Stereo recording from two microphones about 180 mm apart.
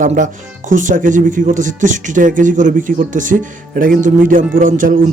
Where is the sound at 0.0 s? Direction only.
45° right (ahead or behind).